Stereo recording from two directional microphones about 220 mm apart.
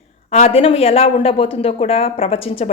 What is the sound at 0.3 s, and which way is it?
Speech, 30° left (ahead or behind).